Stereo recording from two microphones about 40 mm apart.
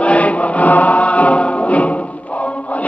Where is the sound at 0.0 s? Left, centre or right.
Left.